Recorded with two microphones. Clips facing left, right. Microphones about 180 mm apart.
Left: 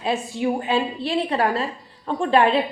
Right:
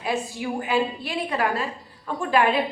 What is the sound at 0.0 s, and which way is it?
A woman's voice, 25° left (ahead or behind).